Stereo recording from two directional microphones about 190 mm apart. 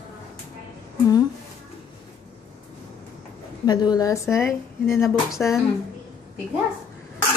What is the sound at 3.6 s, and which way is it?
Speech, 20° left (ahead or behind).